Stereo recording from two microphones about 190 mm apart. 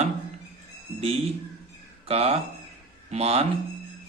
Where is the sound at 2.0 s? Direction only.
30° right (ahead or behind).